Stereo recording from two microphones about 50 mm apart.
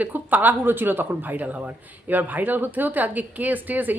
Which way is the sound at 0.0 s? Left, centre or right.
Right.